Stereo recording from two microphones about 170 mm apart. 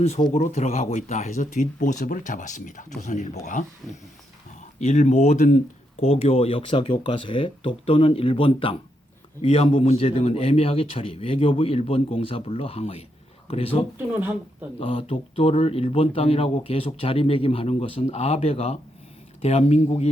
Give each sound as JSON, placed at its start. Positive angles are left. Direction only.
{"t": 0.2, "sound": "speech", "side_deg": 30}
{"t": 0.4, "sound": "speech", "side_deg": 40}
{"t": 3.8, "sound": "speech", "side_deg": 0}
{"t": 4.8, "sound": "speech", "side_deg": 45}